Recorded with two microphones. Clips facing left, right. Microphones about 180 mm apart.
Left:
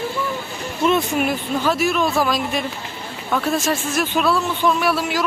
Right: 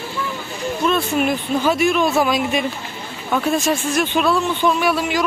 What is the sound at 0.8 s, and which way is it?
Speech, 20° left (ahead or behind).